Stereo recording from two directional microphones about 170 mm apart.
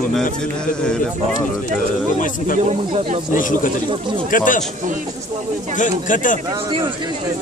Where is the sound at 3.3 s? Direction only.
50° left (ahead or behind).